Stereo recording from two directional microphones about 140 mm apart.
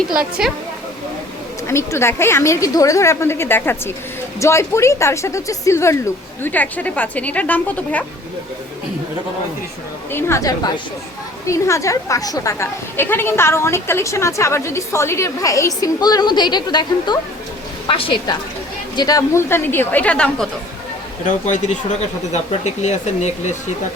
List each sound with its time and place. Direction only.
0.1 s a woman's voice: 5° right (ahead or behind)
1.6 s a woman's voice: 20° left (ahead or behind)
10.1 s a woman's voice: 15° left (ahead or behind); by 18.3 s 35° left (ahead or behind)
18.9 s a woman's voice: 25° left (ahead or behind); by 20.5 s 5° left (ahead or behind)
21.2 s speech: 65° left (ahead or behind)